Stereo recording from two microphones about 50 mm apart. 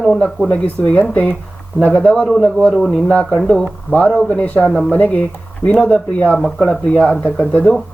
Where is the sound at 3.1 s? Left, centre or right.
Left.